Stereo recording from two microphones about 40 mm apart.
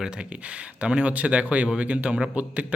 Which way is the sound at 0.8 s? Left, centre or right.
Right.